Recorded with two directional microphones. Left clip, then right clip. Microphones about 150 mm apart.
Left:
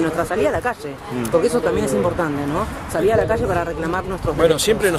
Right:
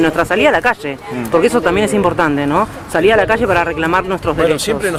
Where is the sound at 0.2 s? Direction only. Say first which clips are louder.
Right 7 dB; 35° right (ahead or behind).